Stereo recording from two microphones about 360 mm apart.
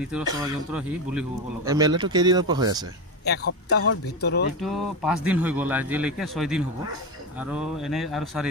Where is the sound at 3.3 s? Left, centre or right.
Left.